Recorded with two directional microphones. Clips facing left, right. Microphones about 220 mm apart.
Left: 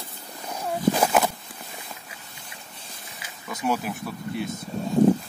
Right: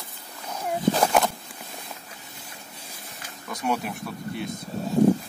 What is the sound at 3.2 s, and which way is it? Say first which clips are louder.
Snake: left 2 dB; centre (ahead or behind).